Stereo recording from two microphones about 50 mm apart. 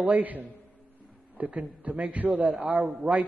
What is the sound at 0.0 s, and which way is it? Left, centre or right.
A man's voice, right.